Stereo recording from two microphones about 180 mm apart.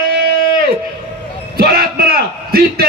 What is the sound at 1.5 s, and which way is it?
Bellow, 60° right (ahead or behind).